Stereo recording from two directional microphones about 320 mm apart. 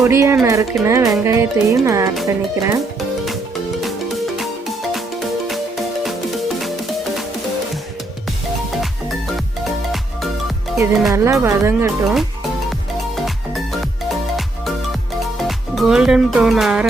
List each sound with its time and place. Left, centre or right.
0.0 s speech: centre
5.5 s music: centre
10.8 s speech: centre
15.4 s speech: centre